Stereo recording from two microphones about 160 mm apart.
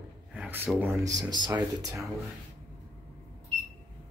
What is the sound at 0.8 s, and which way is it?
Speech, 20° right (ahead or behind).